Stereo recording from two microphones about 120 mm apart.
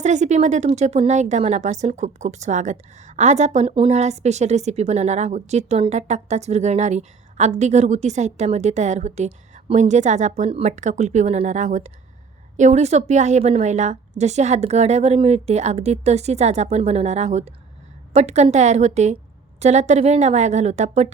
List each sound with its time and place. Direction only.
0.0 s speech: 75° right (ahead or behind)
0.7 s speech: 65° right (ahead or behind)
3.8 s speech: 60° right (ahead or behind)